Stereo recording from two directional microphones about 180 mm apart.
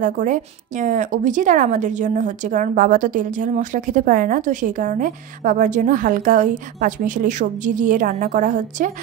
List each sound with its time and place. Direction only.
0.0 s a woman's voice: 45° right (ahead or behind)